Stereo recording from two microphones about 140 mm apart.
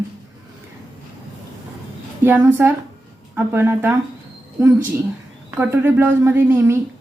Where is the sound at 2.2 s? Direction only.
10° right (ahead or behind).